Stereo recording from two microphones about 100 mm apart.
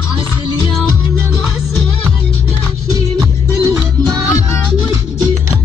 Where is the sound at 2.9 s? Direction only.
40° right (ahead or behind).